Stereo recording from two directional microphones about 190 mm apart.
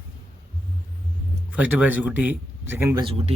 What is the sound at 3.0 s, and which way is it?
Speech, 30° right (ahead or behind).